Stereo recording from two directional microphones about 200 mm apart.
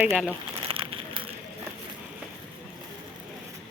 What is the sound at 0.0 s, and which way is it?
Speech, centre (ahead or behind).